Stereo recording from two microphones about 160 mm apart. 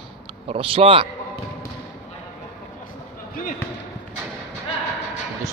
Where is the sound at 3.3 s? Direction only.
60° left (ahead or behind).